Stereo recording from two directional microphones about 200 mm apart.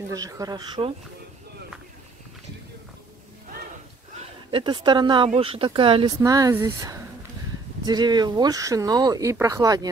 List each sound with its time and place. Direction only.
0.1 s speech: 15° right (ahead or behind)
4.2 s speech: 25° right (ahead or behind)